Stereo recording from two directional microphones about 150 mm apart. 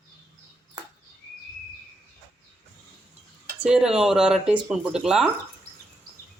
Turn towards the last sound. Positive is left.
turn(degrees=-5)  # may be behind; listen again after turning